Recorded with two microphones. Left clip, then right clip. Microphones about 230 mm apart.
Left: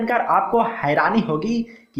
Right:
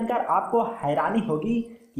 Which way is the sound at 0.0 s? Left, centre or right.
Left.